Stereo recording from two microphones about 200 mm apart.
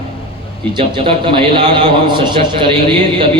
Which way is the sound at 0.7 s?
25° right (ahead or behind).